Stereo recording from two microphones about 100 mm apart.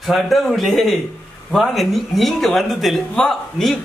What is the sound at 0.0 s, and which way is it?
Speech, centre (ahead or behind).